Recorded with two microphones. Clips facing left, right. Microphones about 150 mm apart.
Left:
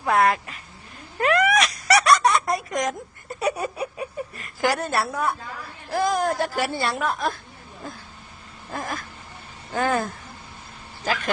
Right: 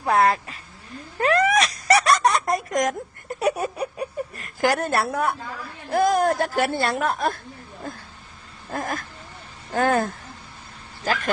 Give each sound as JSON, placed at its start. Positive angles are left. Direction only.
{"t": 0.0, "sound": "speech", "side_deg": -35}
{"t": 1.2, "sound": "a sound", "side_deg": -35}
{"t": 2.6, "sound": "speech", "side_deg": -45}
{"t": 3.5, "sound": "a sound", "side_deg": 0}
{"t": 4.4, "sound": "a woman's voice", "side_deg": -50}
{"t": 8.7, "sound": "speech", "side_deg": -50}
{"t": 11.0, "sound": "speech", "side_deg": -40}